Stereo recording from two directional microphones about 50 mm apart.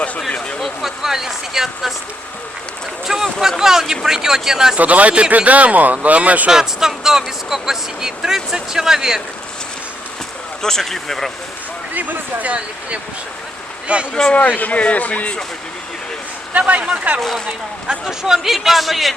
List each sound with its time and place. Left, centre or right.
0.3 s a sound: centre
0.8 s speech: centre
3.1 s speech: centre
4.8 s speech: right
6.5 s speech: centre
10.6 s speech: centre
11.9 s speech: right
14.1 s speech: centre
14.3 s speech: left
16.5 s speech: right
17.2 s speech: centre
18.0 s speech: centre